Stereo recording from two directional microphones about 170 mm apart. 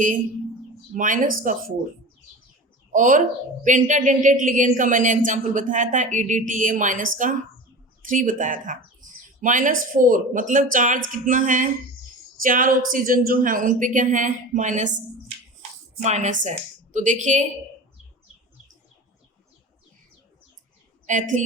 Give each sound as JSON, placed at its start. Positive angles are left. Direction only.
{"t": 0.9, "sound": "a woman's voice", "side_deg": -50}
{"t": 2.9, "sound": "a woman's voice", "side_deg": -50}
{"t": 16.0, "sound": "a woman's voice", "side_deg": -45}
{"t": 21.1, "sound": "a woman's voice", "side_deg": -50}